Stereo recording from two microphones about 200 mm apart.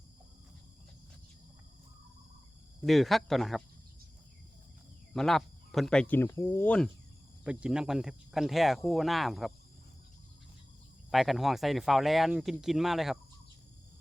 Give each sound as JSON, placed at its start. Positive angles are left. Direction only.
{"t": 2.8, "sound": "speech", "side_deg": 0}
{"t": 5.1, "sound": "speech", "side_deg": 0}
{"t": 7.4, "sound": "speech", "side_deg": -5}
{"t": 11.1, "sound": "speech", "side_deg": 0}